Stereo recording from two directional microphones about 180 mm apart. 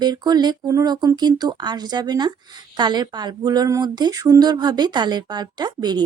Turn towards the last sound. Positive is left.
turn(degrees=-25)  # may be behind; listen again after turning